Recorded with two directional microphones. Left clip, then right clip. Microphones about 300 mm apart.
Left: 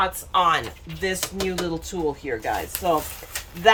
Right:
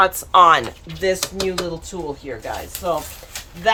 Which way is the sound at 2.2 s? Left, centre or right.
Centre.